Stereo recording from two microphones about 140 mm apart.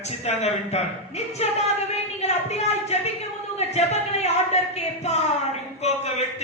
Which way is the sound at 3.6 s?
50° left (ahead or behind).